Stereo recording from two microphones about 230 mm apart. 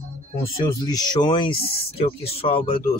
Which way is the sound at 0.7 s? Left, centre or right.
Centre.